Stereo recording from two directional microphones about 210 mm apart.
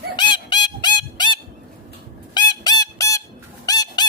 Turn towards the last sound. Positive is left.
turn(degrees=20)  # may be behind; listen again after turning